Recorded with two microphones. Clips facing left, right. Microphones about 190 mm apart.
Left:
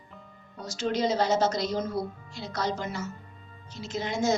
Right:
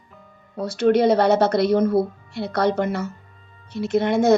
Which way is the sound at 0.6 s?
60° right (ahead or behind).